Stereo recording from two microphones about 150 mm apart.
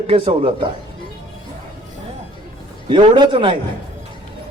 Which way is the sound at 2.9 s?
35° right (ahead or behind).